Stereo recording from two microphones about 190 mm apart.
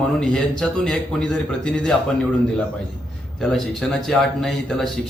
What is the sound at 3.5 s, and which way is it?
A man's voice, centre (ahead or behind).